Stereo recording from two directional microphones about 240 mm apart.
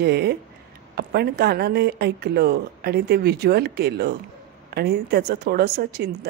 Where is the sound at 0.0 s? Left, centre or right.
Right.